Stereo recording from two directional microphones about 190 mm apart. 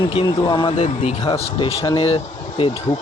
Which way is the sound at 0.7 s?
35° left (ahead or behind).